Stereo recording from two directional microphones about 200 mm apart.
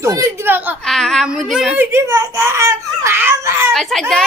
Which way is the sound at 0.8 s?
Centre (ahead or behind).